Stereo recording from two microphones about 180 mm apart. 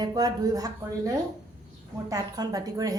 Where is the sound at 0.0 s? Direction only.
20° right (ahead or behind).